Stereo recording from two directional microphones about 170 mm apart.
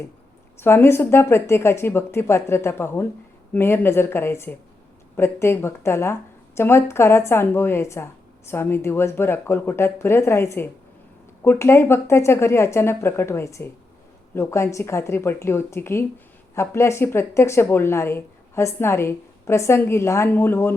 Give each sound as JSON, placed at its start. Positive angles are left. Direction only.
{"t": 0.6, "sound": "a woman's voice", "side_deg": 15}